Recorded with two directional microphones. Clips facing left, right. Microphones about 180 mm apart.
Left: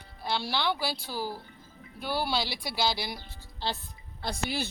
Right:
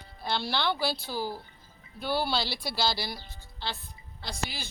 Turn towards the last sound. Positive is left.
turn(degrees=60)  # may be behind; listen again after turning